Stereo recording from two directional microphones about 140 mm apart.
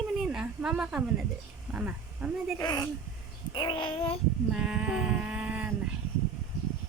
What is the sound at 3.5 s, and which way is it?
Child singing, 35° left (ahead or behind).